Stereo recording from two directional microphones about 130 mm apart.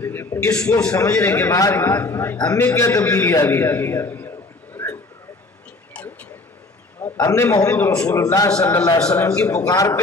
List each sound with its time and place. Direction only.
0.0 s a sound: 20° left (ahead or behind)
0.9 s a man's voice: 25° left (ahead or behind)
2.3 s a man's voice: 30° left (ahead or behind)
7.0 s a sound: 25° left (ahead or behind)
7.5 s a man's voice: 25° left (ahead or behind)
8.5 s a man's voice: 5° left (ahead or behind)
8.7 s a man's voice: 30° left (ahead or behind)
9.2 s a man's voice: 10° left (ahead or behind)
9.7 s a man's voice: 25° left (ahead or behind)